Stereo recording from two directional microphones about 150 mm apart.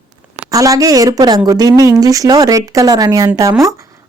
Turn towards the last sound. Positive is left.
turn(degrees=-20)  # may be behind; listen again after turning